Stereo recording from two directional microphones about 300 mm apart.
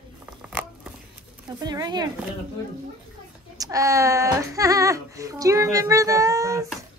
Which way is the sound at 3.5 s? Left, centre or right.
Centre.